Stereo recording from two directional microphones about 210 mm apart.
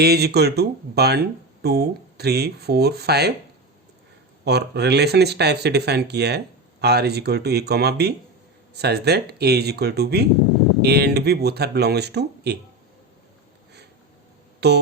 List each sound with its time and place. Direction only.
0.0 s speech: 50° right (ahead or behind)
4.4 s speech: 50° right (ahead or behind)
14.6 s speech: 50° right (ahead or behind)